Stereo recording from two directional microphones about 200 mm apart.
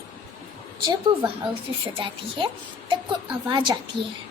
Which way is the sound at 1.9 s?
25° right (ahead or behind).